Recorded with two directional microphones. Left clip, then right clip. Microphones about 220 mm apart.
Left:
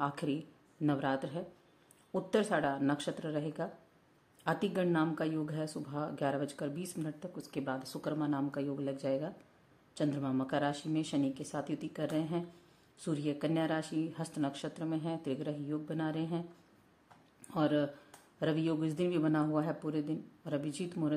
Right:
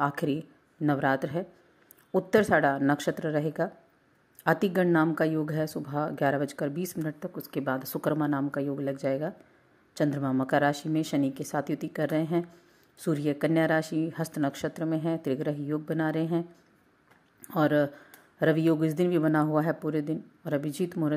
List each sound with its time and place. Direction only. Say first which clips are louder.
0.0 s speech: right 7 dB; 20° right (ahead or behind)
17.5 s speech: right 7 dB; 20° right (ahead or behind)